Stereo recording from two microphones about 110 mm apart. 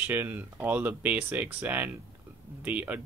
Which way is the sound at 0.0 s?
15° right (ahead or behind).